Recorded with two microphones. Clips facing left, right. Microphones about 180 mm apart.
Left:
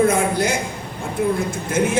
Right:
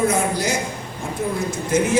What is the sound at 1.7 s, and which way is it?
Speech, 55° left (ahead or behind).